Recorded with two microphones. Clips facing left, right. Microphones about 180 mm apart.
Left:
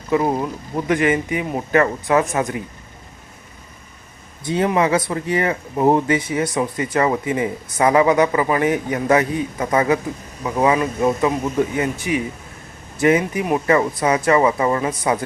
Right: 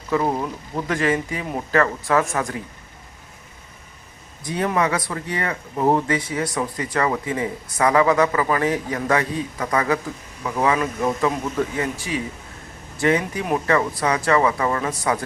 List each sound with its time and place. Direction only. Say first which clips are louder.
0.1 s speech: left 3 dB; 10° left (ahead or behind)
4.4 s speech: left 4 dB; 25° left (ahead or behind)